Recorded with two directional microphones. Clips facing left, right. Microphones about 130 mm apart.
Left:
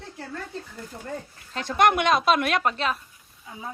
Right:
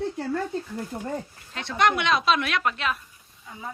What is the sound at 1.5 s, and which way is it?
A woman's voice, 45° left (ahead or behind).